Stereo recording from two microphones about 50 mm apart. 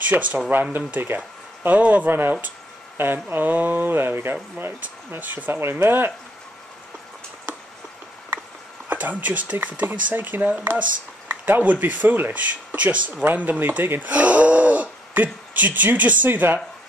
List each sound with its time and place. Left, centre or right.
0.1 s speech: right
1.7 s speech: right
2.0 s speech: right
5.6 s speech: right
8.8 s speech: right